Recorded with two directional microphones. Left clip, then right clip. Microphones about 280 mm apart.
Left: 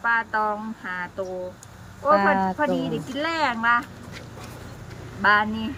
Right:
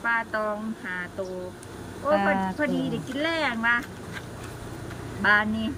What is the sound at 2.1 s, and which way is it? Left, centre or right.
Speech, centre.